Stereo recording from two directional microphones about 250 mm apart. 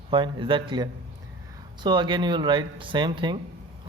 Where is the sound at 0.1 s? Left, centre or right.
Centre.